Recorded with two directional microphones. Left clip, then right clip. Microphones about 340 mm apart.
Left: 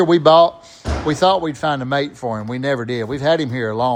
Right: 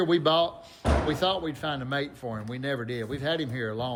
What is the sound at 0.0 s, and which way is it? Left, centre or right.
Speech, centre.